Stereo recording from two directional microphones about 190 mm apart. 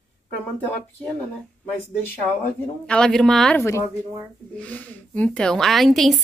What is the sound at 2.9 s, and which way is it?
A woman's voice, 5° left (ahead or behind).